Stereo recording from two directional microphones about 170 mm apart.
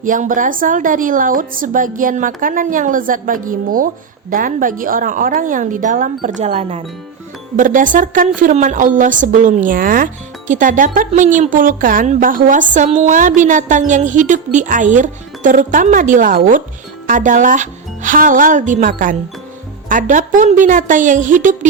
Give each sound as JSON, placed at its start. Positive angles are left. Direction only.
{"t": 0.0, "sound": "a woman's voice", "side_deg": -50}
{"t": 7.5, "sound": "a woman's voice", "side_deg": -50}